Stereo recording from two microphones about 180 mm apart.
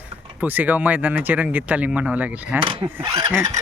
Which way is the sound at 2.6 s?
30° right (ahead or behind).